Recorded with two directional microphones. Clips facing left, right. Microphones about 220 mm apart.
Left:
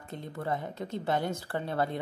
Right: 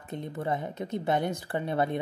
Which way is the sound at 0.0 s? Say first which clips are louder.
Right 3 dB; 20° right (ahead or behind).